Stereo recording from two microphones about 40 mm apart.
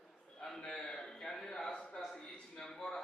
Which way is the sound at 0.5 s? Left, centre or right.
Centre.